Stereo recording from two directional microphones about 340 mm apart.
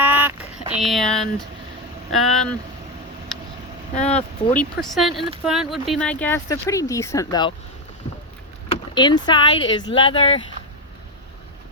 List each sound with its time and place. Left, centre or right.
0.0 s a sound: centre
0.8 s speech: centre
3.9 s speech: centre
4.5 s speech: centre
8.7 s speech: centre